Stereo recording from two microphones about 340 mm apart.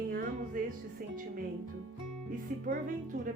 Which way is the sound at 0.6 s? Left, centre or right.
Right.